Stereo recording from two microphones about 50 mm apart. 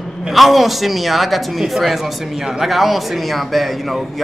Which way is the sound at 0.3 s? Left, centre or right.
Centre.